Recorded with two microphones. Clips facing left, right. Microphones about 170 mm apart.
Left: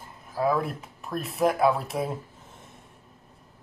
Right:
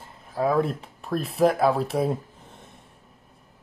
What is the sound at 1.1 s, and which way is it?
Speech, 30° right (ahead or behind).